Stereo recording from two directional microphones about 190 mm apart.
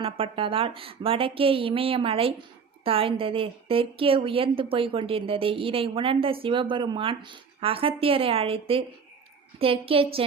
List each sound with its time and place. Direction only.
0.0 s a woman's voice: 30° right (ahead or behind)